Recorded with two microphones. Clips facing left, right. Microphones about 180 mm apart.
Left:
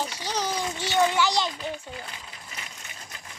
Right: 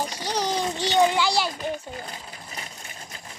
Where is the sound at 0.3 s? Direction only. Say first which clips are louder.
Right 3 dB; 15° right (ahead or behind).